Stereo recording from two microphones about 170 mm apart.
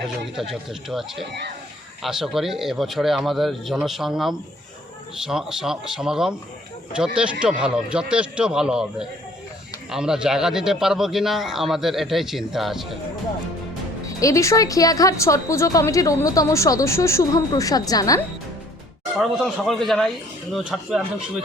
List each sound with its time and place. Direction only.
0.3 s a man's voice: 5° right (ahead or behind)
14.2 s a woman's voice: 20° left (ahead or behind)
19.1 s a man's voice: centre (ahead or behind)